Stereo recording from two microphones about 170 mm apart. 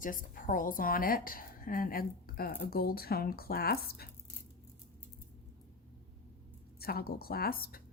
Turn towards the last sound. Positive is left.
turn(degrees=60)  # may be behind; listen again after turning